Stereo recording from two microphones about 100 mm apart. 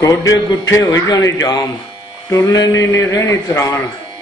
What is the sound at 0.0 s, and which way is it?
Speech, 35° left (ahead or behind).